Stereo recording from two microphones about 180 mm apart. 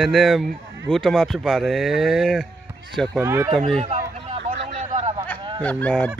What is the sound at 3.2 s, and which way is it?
Speech, 15° right (ahead or behind).